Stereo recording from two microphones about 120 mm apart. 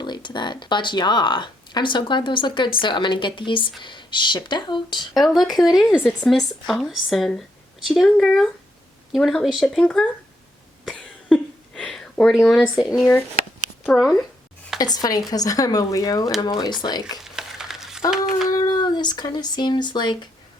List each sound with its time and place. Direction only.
0.0 s speech: 40° left (ahead or behind)
5.1 s speech: centre (ahead or behind)
10.8 s a sound: 5° left (ahead or behind)
13.8 s speech: centre (ahead or behind)
14.8 s speech: 35° left (ahead or behind)
17.2 s a sound: 5° right (ahead or behind)
18.4 s speech: 35° left (ahead or behind)